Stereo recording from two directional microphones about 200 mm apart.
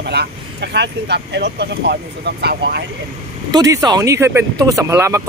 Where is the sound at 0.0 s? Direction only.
55° right (ahead or behind).